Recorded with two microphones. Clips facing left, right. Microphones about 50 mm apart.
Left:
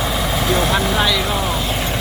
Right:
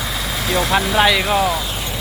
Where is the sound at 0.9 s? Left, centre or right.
Right.